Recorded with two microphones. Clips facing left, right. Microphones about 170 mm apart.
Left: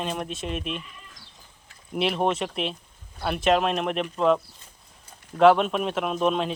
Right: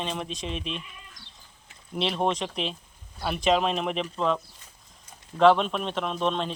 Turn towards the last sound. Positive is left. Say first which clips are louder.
# left 3 dB
turn(degrees=5)  # may be behind; listen again after turning